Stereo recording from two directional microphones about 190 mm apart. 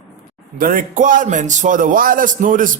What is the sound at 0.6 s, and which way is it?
A man's voice, 45° right (ahead or behind).